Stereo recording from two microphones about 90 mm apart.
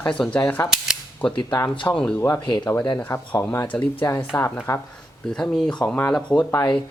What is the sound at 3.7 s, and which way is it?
A woman's voice, 20° left (ahead or behind).